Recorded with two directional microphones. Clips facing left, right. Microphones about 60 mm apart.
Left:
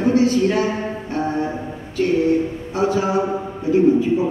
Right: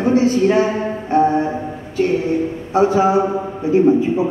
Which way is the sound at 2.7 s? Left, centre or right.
Right.